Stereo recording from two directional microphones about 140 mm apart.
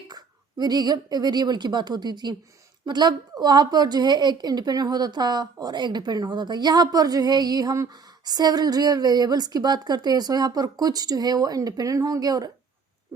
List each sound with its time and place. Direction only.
0.6 s a woman's voice: 30° right (ahead or behind)